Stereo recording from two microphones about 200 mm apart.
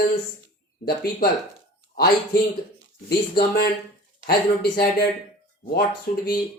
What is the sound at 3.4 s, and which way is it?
Speech, 50° left (ahead or behind).